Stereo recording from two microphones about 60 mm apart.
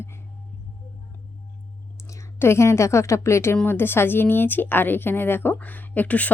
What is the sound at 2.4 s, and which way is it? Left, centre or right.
A woman's voice, left.